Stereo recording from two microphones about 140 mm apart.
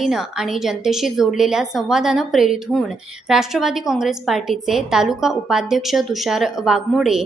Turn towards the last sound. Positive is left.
turn(degrees=-5)  # may be behind; listen again after turning